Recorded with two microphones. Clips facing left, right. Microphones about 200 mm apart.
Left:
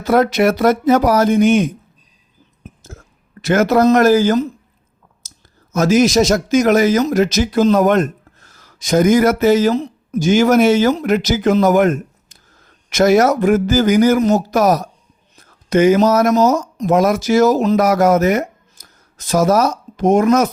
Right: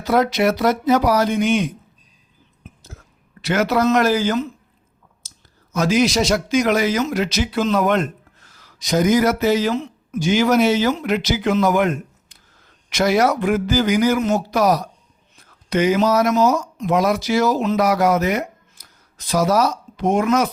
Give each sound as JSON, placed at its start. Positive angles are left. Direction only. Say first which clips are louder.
{"t": 0.0, "sound": "speech", "louder": "left 4 dB", "side_deg": 50}
{"t": 2.6, "sound": "a sound", "louder": "left 5 dB", "side_deg": 45}
{"t": 5.7, "sound": "speech", "louder": "left 5 dB", "side_deg": 45}